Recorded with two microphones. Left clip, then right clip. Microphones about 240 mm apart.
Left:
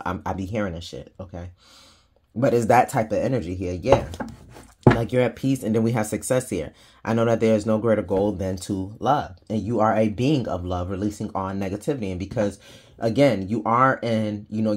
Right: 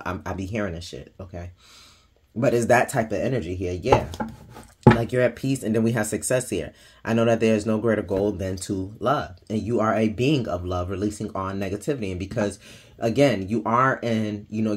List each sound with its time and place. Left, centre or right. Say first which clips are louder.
0.0 s speech: left 2 dB; left
2.4 s speech: left 1 dB; left
5.0 s speech: even; left